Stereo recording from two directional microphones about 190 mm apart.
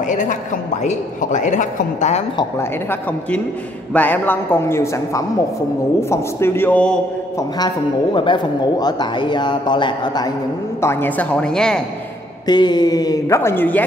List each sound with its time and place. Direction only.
0.0 s a man's voice: 40° left (ahead or behind)
2.3 s a man's voice: 10° left (ahead or behind)
7.3 s a man's voice: 20° left (ahead or behind)
10.8 s a man's voice: 10° left (ahead or behind)
12.4 s a man's voice: 20° left (ahead or behind)